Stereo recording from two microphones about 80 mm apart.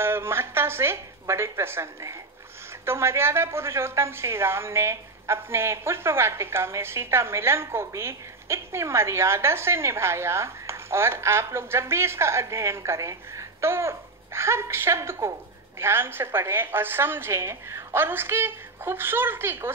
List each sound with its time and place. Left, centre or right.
0.0 s a woman's voice: right